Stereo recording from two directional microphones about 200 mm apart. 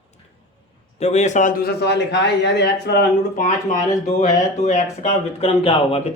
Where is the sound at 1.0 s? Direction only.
35° left (ahead or behind); by 3.4 s 55° left (ahead or behind).